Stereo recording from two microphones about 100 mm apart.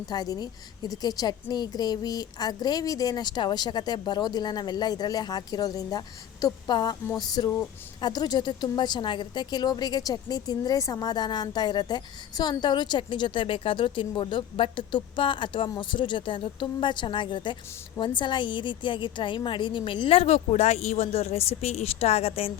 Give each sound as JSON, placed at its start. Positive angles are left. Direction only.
{"t": 0.1, "sound": "a woman's voice", "side_deg": 40}